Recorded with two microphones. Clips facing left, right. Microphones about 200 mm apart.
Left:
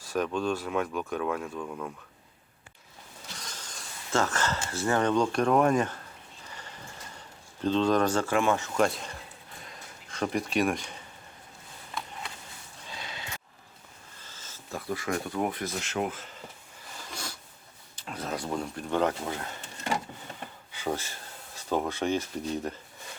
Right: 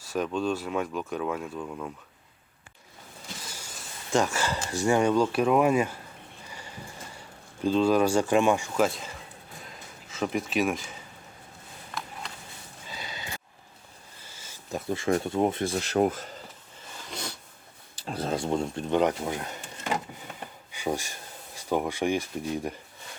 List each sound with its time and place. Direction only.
0.4 s speech: 5° right (ahead or behind)
3.3 s speech: 10° right (ahead or behind)
7.6 s speech: 10° right (ahead or behind)
12.8 s a sound: centre (ahead or behind)
14.2 s speech: 10° right (ahead or behind); by 16.3 s 40° right (ahead or behind)
17.1 s a sound: 20° right (ahead or behind)
17.9 s speech: 35° right (ahead or behind); by 19.5 s 15° right (ahead or behind)
20.7 s speech: 15° right (ahead or behind)